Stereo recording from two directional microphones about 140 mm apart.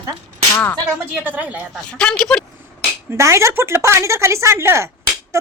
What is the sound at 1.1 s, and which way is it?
Speech, 15° right (ahead or behind).